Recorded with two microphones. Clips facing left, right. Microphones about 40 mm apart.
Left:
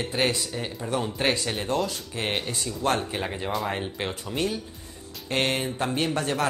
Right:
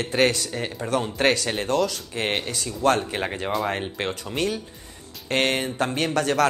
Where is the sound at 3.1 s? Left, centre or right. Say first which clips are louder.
Right 3 dB; right.